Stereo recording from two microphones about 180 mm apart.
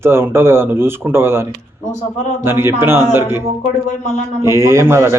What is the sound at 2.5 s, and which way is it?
Speech, 15° right (ahead or behind).